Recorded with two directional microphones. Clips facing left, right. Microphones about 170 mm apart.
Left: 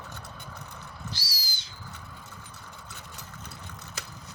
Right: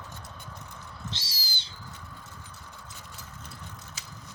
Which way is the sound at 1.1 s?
25° right (ahead or behind).